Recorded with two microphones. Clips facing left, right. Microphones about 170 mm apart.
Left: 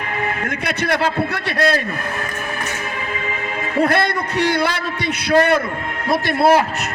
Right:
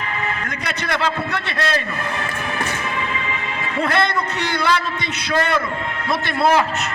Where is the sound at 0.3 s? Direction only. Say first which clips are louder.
Left 3 dB; 55° left (ahead or behind).